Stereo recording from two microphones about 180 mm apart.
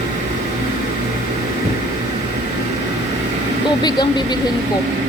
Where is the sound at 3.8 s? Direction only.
25° left (ahead or behind).